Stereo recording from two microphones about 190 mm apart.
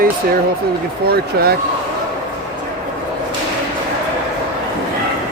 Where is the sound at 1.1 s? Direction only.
55° right (ahead or behind).